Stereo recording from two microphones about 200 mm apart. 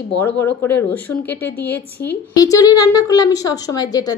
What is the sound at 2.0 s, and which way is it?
Speech, 50° left (ahead or behind).